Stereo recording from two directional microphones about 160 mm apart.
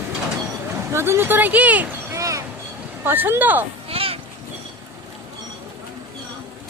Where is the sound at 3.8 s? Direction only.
35° right (ahead or behind).